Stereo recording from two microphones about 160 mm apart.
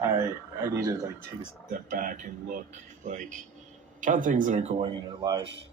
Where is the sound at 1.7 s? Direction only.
55° right (ahead or behind).